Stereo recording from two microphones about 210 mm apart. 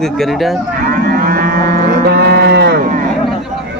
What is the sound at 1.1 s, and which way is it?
Cattle, 45° right (ahead or behind).